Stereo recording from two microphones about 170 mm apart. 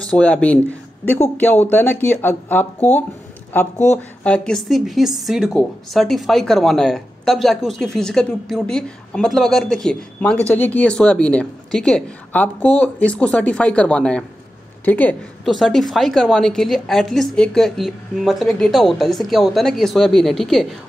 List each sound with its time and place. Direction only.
0.0 s speech: 5° left (ahead or behind)
3.7 s speech: 45° left (ahead or behind)
4.2 s a woman's voice: 5° left (ahead or behind)